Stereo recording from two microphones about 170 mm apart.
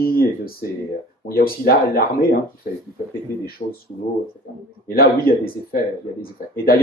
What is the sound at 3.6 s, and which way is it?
Speech, 50° left (ahead or behind).